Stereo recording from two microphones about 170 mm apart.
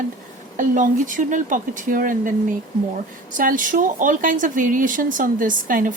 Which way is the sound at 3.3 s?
50° right (ahead or behind).